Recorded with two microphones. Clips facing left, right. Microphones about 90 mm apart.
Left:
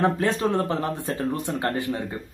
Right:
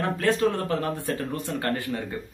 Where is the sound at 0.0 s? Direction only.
25° left (ahead or behind).